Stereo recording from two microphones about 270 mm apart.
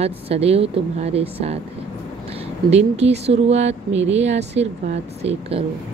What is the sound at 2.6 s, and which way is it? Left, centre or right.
Speech, right.